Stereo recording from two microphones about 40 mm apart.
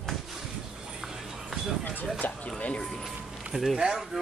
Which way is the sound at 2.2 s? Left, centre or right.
Left.